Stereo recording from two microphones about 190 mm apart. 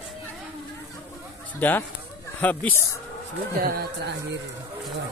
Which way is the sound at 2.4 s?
10° left (ahead or behind).